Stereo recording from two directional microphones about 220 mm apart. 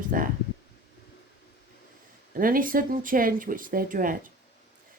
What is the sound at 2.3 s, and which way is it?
Speech, 40° right (ahead or behind).